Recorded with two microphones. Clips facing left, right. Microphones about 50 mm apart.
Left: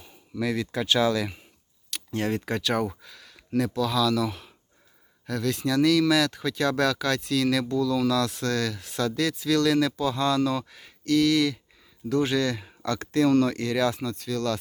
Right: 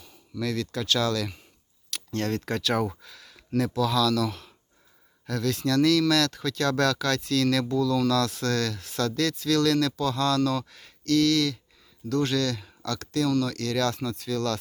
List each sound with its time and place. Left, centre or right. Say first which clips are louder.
0.0 s speech: left 2 dB; centre
13.6 s speech: left 2 dB; centre